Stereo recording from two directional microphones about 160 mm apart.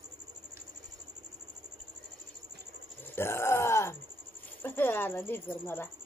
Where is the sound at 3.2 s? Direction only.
15° left (ahead or behind).